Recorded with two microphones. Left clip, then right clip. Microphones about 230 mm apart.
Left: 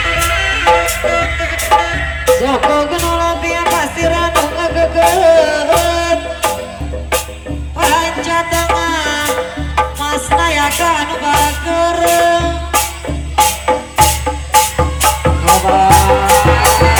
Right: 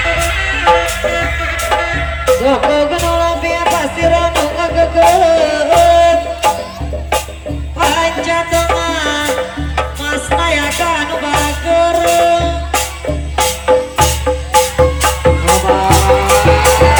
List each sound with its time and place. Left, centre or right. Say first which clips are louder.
0.0 s music: left 1 dB; left
7.8 s music: even; left
15.0 s music: even; left